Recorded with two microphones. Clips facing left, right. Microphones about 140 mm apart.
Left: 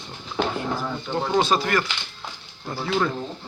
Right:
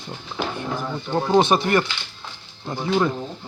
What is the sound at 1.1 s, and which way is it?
Speech, 20° right (ahead or behind).